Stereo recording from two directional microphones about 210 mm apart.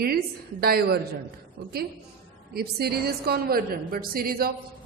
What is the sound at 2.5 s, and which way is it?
A woman's voice, 50° right (ahead or behind).